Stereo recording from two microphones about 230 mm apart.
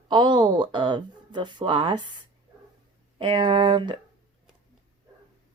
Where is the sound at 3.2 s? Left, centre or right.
Right.